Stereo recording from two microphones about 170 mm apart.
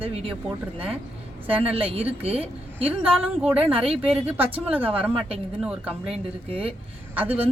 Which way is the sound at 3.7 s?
35° right (ahead or behind).